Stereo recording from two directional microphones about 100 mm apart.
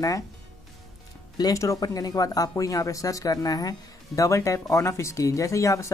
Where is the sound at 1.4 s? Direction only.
35° left (ahead or behind).